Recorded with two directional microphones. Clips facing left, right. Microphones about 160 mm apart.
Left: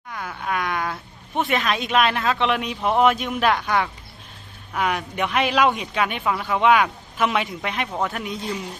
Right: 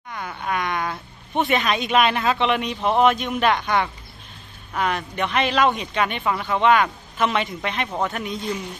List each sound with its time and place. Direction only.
0.1 s wail: centre (ahead or behind)
1.4 s speech: centre (ahead or behind)